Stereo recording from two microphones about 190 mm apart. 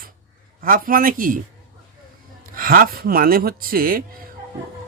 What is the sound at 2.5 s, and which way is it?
Speech, 50° right (ahead or behind).